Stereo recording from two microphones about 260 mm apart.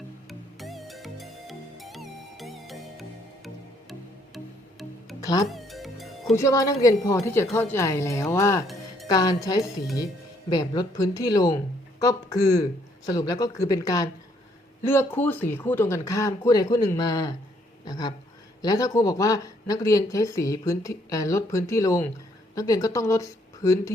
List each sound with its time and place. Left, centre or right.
0.3 s music: centre
5.2 s speech: centre
5.5 s music: centre
6.3 s speech: centre